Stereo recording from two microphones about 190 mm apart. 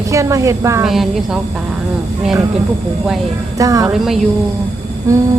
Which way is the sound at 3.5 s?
20° right (ahead or behind).